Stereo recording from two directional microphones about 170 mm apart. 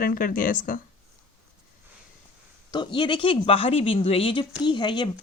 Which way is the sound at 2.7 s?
25° left (ahead or behind).